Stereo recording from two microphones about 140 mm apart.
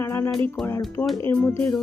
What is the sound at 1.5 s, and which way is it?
Speech, 20° left (ahead or behind).